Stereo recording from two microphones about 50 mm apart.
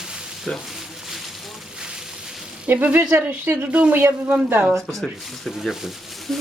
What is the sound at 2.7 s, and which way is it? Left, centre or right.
Speech, right.